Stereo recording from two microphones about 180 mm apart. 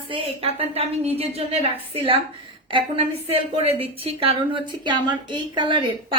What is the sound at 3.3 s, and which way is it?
A woman's voice, 30° right (ahead or behind).